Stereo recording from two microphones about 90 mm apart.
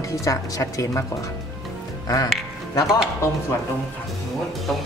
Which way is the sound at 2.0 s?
45° left (ahead or behind).